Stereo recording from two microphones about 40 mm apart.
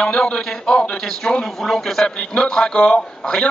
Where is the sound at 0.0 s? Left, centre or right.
Centre.